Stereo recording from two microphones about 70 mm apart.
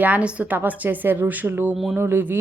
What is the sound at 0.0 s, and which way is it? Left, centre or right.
Speech, right.